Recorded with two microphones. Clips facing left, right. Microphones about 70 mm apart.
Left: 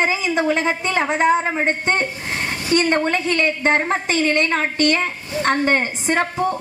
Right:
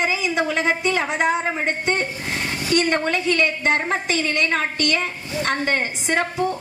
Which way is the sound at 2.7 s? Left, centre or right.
Left.